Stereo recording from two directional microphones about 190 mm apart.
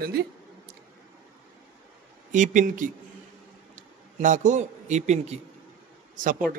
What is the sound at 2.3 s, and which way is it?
A man's voice, 40° right (ahead or behind).